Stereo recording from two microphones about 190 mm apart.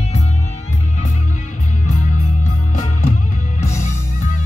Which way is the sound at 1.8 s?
40° left (ahead or behind).